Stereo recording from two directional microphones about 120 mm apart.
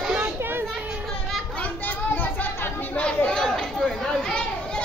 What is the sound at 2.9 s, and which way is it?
Chatter, 10° left (ahead or behind).